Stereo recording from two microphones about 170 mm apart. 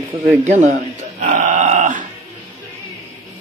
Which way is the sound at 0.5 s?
45° right (ahead or behind).